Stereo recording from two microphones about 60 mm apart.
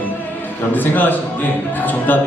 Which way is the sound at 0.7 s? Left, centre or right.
Left.